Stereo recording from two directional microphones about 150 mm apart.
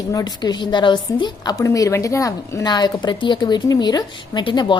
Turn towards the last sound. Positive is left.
turn(degrees=30)  # may be behind; listen again after turning